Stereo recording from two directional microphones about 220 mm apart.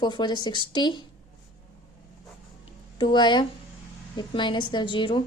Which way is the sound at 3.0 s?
20° left (ahead or behind).